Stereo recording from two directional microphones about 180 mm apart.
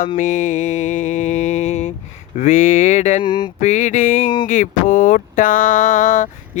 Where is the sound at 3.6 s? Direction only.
40° left (ahead or behind).